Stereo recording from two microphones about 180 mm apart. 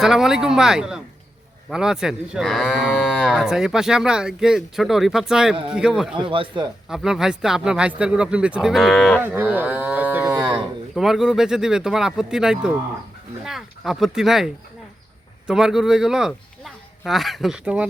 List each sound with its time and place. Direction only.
0.0 s speech: 5° right (ahead or behind)
6.1 s speech: 30° right (ahead or behind)
6.8 s speech: 5° right (ahead or behind)
9.2 s moo: 10° right (ahead or behind)
10.9 s a man's voice: centre (ahead or behind)